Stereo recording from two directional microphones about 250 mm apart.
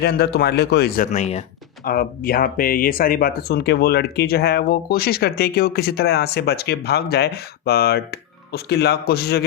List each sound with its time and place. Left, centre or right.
0.0 s speech: left